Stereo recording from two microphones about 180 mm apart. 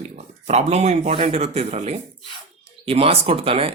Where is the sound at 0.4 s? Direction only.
35° right (ahead or behind).